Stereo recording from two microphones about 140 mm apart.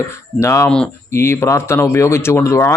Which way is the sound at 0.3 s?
20° left (ahead or behind).